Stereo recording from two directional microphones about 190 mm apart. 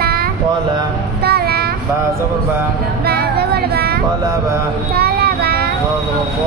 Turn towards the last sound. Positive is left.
turn(degrees=-55)  # may be behind; listen again after turning